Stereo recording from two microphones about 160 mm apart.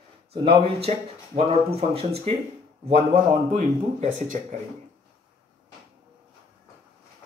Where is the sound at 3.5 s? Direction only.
45° right (ahead or behind).